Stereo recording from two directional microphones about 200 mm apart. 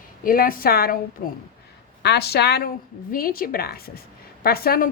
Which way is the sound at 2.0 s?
55° left (ahead or behind).